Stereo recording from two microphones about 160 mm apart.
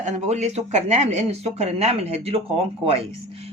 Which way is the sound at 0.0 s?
45° right (ahead or behind).